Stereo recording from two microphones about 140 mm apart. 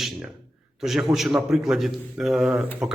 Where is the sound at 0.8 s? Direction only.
Centre (ahead or behind).